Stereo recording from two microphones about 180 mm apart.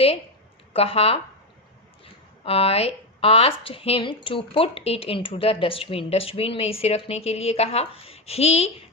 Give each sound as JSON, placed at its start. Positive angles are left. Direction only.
{"t": 0.7, "sound": "speech", "side_deg": 35}
{"t": 2.4, "sound": "speech", "side_deg": 30}